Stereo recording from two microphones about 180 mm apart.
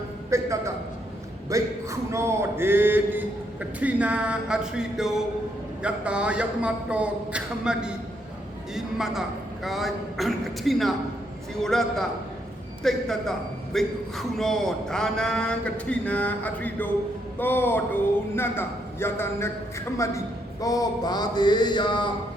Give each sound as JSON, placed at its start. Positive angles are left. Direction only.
{"t": 0.3, "sound": "a man's voice", "side_deg": -15}